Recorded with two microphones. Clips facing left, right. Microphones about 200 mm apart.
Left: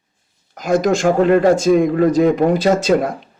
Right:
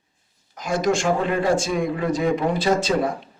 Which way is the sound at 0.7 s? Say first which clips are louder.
Left 6 dB; 40° left (ahead or behind).